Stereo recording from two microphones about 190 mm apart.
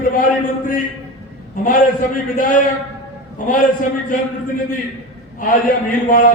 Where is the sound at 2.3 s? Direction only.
45° left (ahead or behind).